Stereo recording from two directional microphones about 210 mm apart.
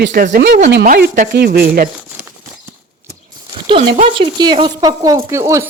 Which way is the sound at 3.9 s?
30° right (ahead or behind).